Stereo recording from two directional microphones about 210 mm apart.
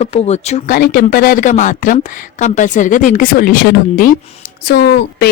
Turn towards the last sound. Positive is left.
turn(degrees=50)  # may be behind; listen again after turning